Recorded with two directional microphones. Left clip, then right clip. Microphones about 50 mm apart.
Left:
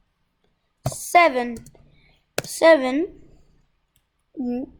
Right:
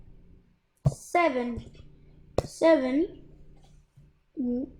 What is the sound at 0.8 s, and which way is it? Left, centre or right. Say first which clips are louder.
A woman's voice: left 9 dB; left.